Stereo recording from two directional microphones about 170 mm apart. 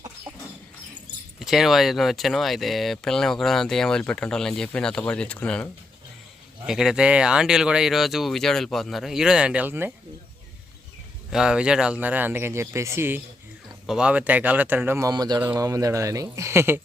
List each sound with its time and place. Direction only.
1.4 s speech: centre (ahead or behind)
6.7 s speech: 5° right (ahead or behind)
11.3 s speech: 5° right (ahead or behind)